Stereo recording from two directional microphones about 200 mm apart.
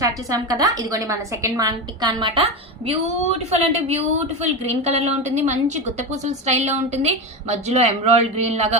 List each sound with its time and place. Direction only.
0.0 s a woman's voice: 15° right (ahead or behind); by 8.8 s 35° right (ahead or behind)